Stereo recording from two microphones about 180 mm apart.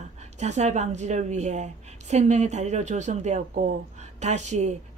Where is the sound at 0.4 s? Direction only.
40° right (ahead or behind).